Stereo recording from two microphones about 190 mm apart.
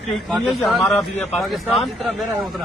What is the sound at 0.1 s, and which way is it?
A man's voice, centre (ahead or behind).